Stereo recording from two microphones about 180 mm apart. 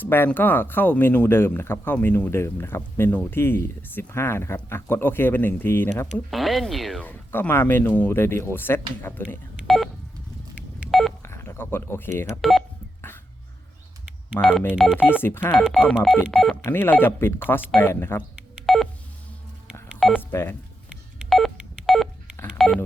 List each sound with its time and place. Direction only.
0.0 s speech: 10° left (ahead or behind)
6.1 s speech: centre (ahead or behind)
9.6 s telephone dialing: centre (ahead or behind)
11.2 s speech: 15° left (ahead or behind)
12.4 s speech: centre (ahead or behind)
14.3 s speech: 10° left (ahead or behind)
16.6 s speech: 10° left (ahead or behind)
18.5 s telephone dialing: centre (ahead or behind)
19.9 s telephone dialing: centre (ahead or behind)
20.3 s speech: 15° left (ahead or behind)
21.2 s telephone dialing: centre (ahead or behind)